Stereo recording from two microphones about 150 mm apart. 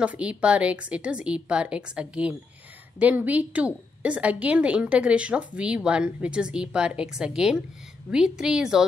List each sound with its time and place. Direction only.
0.0 s a woman's voice: 10° right (ahead or behind)